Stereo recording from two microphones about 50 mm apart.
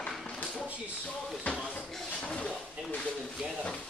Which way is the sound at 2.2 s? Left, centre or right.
Centre.